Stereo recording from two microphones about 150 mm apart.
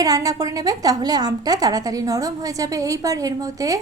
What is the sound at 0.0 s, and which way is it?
A woman's voice, 25° right (ahead or behind).